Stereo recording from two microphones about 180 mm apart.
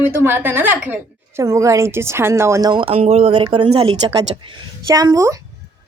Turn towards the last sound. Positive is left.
turn(degrees=-20)  # may be behind; listen again after turning